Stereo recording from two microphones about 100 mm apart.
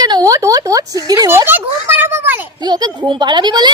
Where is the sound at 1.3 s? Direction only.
20° right (ahead or behind).